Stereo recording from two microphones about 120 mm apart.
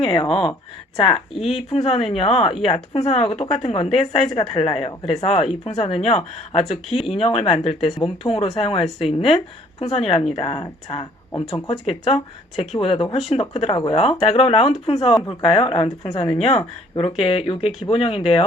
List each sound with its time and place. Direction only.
0.0 s a woman's voice: 45° left (ahead or behind)
1.3 s speech: centre (ahead or behind)
1.7 s a woman's voice: 50° left (ahead or behind)